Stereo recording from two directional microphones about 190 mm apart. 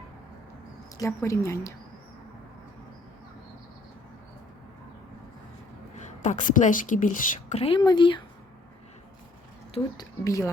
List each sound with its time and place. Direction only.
0.9 s speech: 15° left (ahead or behind)
6.0 s speech: 40° left (ahead or behind)
7.6 s speech: 25° left (ahead or behind)
9.7 s speech: 20° left (ahead or behind)